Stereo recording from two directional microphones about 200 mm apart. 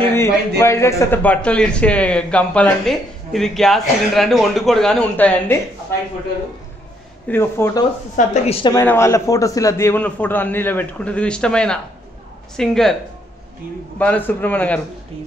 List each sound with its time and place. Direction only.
0.0 s a sound: 10° left (ahead or behind)
0.6 s speech: 15° left (ahead or behind)
7.2 s a man's voice: 10° left (ahead or behind)
8.2 s a woman's voice: 40° left (ahead or behind)
8.6 s a man's voice: 15° left (ahead or behind)
13.9 s a man's voice: 10° left (ahead or behind)